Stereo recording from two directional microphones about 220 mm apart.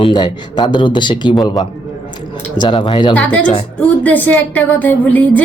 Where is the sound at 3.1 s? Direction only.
5° left (ahead or behind).